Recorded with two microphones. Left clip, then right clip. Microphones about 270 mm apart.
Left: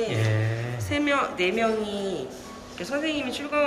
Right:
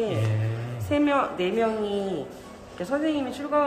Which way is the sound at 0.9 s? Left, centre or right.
Right.